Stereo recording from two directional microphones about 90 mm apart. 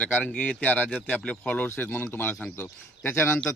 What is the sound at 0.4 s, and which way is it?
A man's voice, 20° left (ahead or behind).